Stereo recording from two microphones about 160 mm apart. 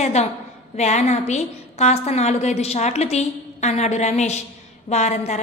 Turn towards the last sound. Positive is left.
turn(degrees=45)  # may be behind; listen again after turning